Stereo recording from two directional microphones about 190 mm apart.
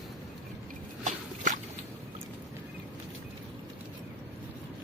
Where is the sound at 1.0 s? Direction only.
40° right (ahead or behind).